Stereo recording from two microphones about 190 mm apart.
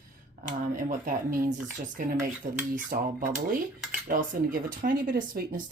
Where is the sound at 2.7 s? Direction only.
45° right (ahead or behind).